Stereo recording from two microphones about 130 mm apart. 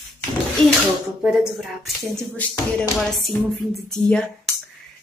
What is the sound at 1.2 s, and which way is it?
Speech, 5° right (ahead or behind).